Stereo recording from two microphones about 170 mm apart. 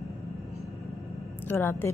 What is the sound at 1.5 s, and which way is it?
Speech, 10° left (ahead or behind).